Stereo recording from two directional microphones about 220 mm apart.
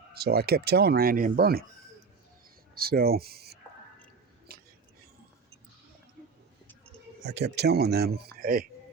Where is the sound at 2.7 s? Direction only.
45° right (ahead or behind).